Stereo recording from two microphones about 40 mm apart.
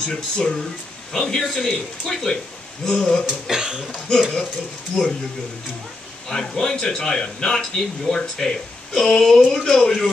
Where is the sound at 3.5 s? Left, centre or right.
Centre.